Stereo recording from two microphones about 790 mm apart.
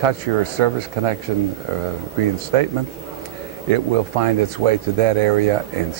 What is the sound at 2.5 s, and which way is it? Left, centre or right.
Speech, right.